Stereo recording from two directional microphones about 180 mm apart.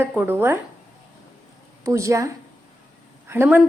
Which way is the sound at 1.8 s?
15° right (ahead or behind).